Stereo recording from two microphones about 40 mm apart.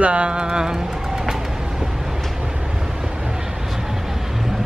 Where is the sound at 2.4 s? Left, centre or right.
Centre.